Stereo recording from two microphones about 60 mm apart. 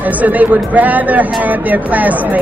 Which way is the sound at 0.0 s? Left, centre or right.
Right.